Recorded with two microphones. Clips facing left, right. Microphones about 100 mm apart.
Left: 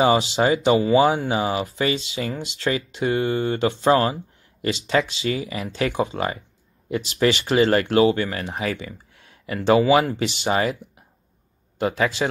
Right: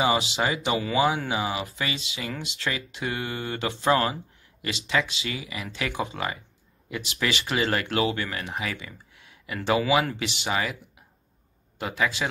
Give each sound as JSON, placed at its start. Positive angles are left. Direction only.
{"t": 0.0, "sound": "speech", "side_deg": 35}
{"t": 11.8, "sound": "speech", "side_deg": 30}